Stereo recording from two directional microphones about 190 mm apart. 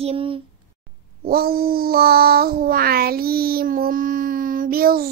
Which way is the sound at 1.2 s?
55° right (ahead or behind).